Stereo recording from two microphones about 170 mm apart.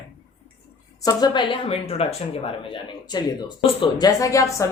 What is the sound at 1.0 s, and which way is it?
A woman's voice, 25° left (ahead or behind).